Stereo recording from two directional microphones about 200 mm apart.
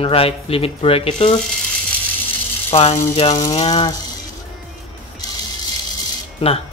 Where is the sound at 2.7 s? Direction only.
30° left (ahead or behind).